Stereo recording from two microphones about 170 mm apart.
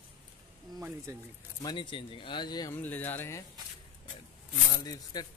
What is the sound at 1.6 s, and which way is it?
Speech, 30° left (ahead or behind).